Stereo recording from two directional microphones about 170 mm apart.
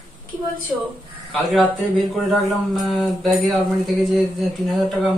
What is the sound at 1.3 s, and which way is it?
Speech, centre (ahead or behind).